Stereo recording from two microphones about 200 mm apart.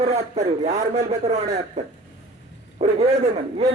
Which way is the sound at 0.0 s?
30° right (ahead or behind).